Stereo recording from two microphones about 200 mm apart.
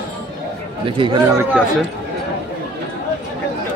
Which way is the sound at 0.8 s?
25° right (ahead or behind).